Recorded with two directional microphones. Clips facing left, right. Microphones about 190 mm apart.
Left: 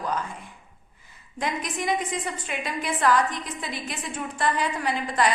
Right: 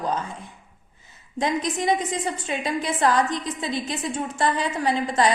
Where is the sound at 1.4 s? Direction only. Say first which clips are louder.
Right 5 dB; 25° right (ahead or behind).